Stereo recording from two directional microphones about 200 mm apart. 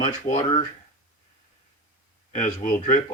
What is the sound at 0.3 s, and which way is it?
Speech, 45° left (ahead or behind).